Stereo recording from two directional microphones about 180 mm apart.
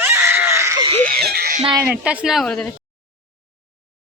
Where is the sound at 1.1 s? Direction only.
60° right (ahead or behind).